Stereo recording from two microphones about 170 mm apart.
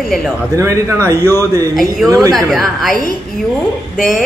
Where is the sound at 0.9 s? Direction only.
15° left (ahead or behind).